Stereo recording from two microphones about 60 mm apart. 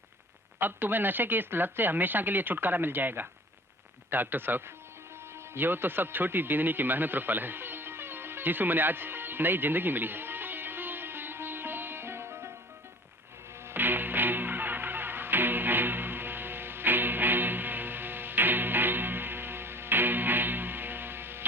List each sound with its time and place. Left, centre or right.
0.6 s speech: right
5.5 s a sound: right
13.7 s music: right